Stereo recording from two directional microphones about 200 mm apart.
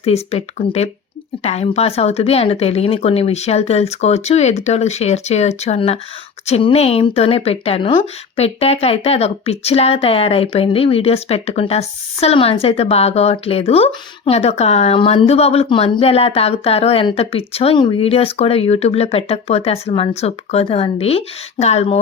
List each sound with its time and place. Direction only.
0.0 s speech: 30° left (ahead or behind)